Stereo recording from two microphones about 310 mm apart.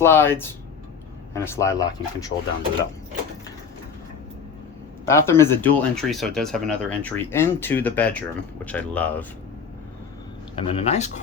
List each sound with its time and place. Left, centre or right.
0.0 s speech: centre
5.0 s speech: centre
10.5 s speech: centre